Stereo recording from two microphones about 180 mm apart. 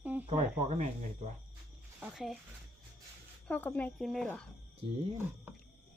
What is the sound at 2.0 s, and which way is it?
Speech, 5° right (ahead or behind).